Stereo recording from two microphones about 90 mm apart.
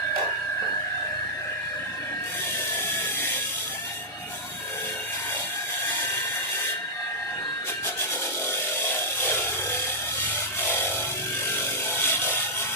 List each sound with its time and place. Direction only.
11.9 s wood: 25° left (ahead or behind)